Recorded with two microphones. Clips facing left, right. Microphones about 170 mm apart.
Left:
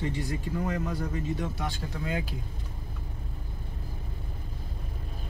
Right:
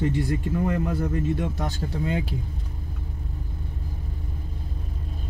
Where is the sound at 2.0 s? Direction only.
25° right (ahead or behind).